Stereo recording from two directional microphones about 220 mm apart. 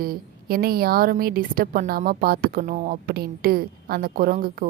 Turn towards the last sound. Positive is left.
turn(degrees=-40)  # may be behind; listen again after turning